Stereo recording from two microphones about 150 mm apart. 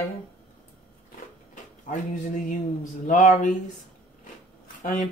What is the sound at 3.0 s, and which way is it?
Speech, 60° left (ahead or behind).